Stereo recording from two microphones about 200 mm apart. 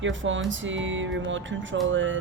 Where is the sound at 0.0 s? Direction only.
70° right (ahead or behind).